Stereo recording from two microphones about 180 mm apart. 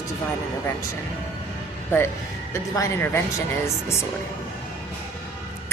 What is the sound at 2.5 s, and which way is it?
Speech, 15° left (ahead or behind).